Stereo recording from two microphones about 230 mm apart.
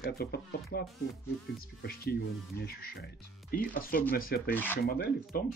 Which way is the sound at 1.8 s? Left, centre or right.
Left.